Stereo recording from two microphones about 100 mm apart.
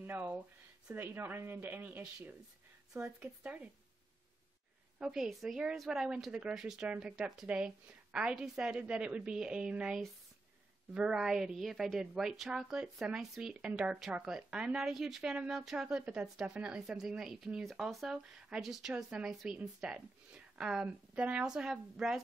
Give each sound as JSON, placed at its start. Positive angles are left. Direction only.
{"t": 0.0, "sound": "a woman's voice", "side_deg": -20}
{"t": 4.9, "sound": "a woman's voice", "side_deg": -5}